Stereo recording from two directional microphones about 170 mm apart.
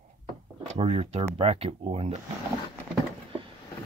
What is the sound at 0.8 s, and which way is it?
Speech, 35° right (ahead or behind).